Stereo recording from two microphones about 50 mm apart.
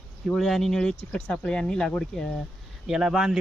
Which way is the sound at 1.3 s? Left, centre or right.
Centre.